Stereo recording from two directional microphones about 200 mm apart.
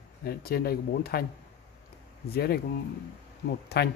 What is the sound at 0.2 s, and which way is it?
Speech, 50° left (ahead or behind).